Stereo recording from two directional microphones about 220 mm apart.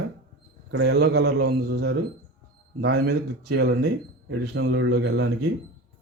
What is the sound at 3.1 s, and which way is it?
Speech, 45° right (ahead or behind).